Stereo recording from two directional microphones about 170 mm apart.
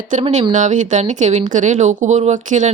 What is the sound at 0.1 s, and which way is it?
A woman's voice, 45° right (ahead or behind).